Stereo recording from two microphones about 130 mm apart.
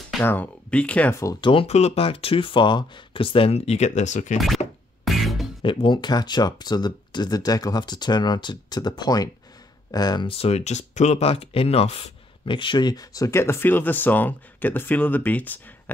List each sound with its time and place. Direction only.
0.2 s speech: 15° left (ahead or behind)
1.4 s speech: 40° left (ahead or behind)
1.7 s speech: 55° left (ahead or behind)
5.0 s music: centre (ahead or behind)
5.6 s speech: 40° left (ahead or behind); by 15.5 s 15° left (ahead or behind)